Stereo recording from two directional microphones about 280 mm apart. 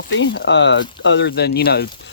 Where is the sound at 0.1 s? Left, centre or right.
Left.